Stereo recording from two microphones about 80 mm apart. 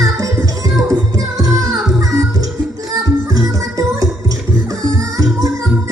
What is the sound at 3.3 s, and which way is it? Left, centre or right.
Music, right.